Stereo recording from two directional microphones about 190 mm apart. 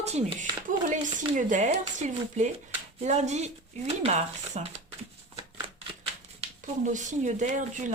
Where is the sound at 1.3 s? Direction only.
40° right (ahead or behind).